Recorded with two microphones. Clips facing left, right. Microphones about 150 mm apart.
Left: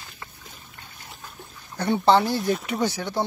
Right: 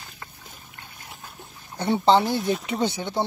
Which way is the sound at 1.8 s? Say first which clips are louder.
Even; 20° right (ahead or behind).